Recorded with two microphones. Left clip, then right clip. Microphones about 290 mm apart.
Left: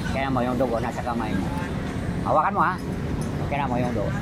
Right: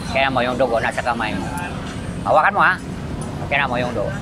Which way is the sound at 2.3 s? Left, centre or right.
Right.